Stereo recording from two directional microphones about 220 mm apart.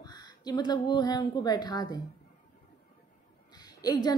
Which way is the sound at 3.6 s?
15° left (ahead or behind).